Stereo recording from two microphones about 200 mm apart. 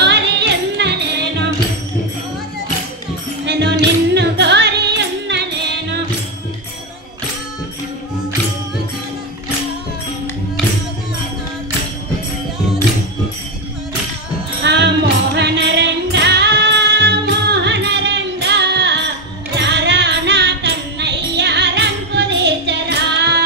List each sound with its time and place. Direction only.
0.0 s music: 60° right (ahead or behind)
3.4 s music: 60° right (ahead or behind)
14.6 s music: 60° right (ahead or behind)